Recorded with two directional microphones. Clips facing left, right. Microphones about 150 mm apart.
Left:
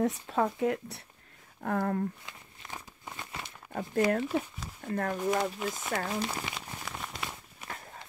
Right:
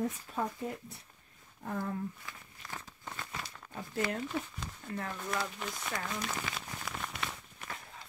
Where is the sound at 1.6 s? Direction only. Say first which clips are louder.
Left 7 dB; 65° left (ahead or behind).